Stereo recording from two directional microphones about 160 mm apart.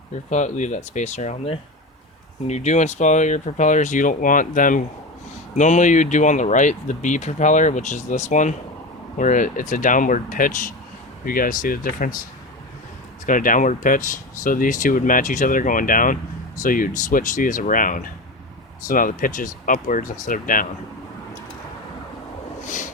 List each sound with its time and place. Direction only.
0.3 s speech: 50° left (ahead or behind)
13.2 s speech: 55° left (ahead or behind)
22.6 s a sound: 50° left (ahead or behind)